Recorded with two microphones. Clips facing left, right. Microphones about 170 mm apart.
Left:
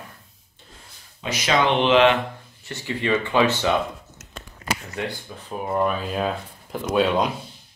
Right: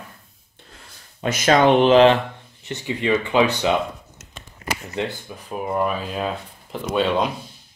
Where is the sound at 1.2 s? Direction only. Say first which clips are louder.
Right 5 dB; 50° right (ahead or behind).